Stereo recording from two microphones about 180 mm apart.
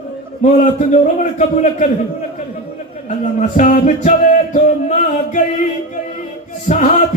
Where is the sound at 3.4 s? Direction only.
45° left (ahead or behind).